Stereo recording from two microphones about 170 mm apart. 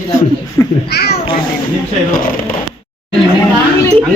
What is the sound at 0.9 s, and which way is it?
Speech, 70° left (ahead or behind).